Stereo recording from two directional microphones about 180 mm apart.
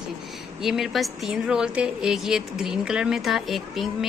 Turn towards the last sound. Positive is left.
turn(degrees=0)  # may be behind; listen again after turning